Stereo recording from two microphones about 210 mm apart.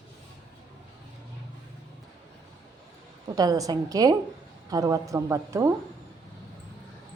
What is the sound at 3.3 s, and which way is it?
Speech, 15° right (ahead or behind).